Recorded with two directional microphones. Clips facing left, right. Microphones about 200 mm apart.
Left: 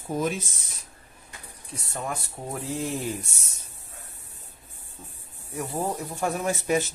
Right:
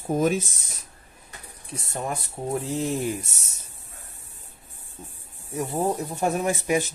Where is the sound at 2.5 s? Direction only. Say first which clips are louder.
Right 4 dB; 20° right (ahead or behind).